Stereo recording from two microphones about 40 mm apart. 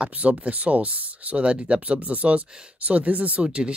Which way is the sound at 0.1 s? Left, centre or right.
Right.